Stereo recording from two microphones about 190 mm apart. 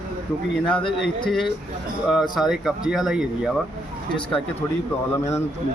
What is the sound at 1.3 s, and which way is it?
Speech, centre (ahead or behind).